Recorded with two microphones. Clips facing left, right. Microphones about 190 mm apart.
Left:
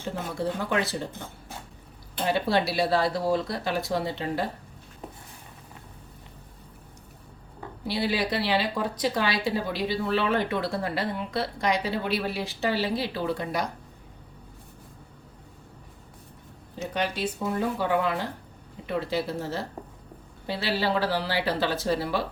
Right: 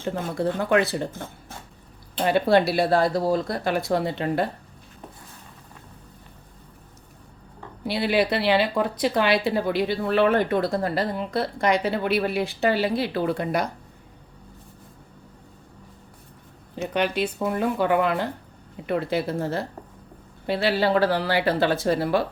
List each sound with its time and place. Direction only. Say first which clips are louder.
0.3 s a woman's voice: right 6 dB; 60° right (ahead or behind)
2.2 s a woman's voice: right 6 dB; 55° right (ahead or behind)
7.9 s a woman's voice: right 5 dB; 60° right (ahead or behind)
16.7 s a woman's voice: right 5 dB; 60° right (ahead or behind)